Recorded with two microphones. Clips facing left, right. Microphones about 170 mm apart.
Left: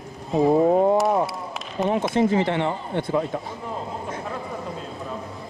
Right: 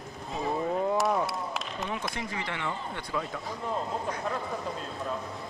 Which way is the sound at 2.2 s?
25° left (ahead or behind).